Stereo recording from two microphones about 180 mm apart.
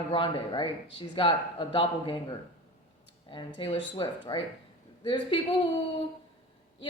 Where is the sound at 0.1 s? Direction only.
30° left (ahead or behind).